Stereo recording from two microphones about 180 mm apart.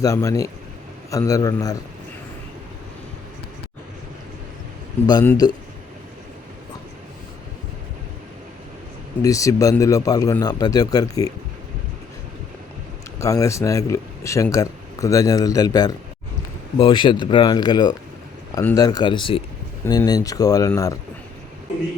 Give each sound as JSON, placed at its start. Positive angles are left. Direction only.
{"t": 0.0, "sound": "speech", "side_deg": 15}
{"t": 5.2, "sound": "speech", "side_deg": 10}
{"t": 9.2, "sound": "speech", "side_deg": 20}
{"t": 13.1, "sound": "speech", "side_deg": 20}
{"t": 19.8, "sound": "speech", "side_deg": 15}